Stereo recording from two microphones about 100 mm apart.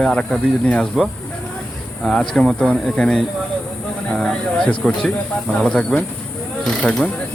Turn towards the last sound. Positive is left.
turn(degrees=10)  # may be behind; listen again after turning